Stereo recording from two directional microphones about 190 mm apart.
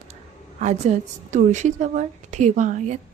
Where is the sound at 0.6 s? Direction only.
35° right (ahead or behind).